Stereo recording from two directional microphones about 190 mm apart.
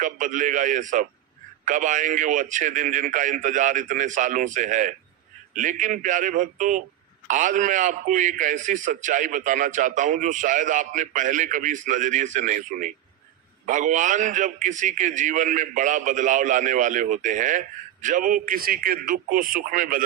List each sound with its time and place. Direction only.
0.0 s a man's voice: 45° right (ahead or behind)